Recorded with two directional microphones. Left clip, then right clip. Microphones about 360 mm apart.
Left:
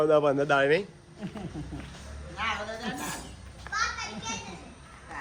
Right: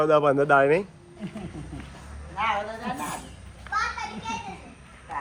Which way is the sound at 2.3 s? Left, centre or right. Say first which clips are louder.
Right 5 dB; centre.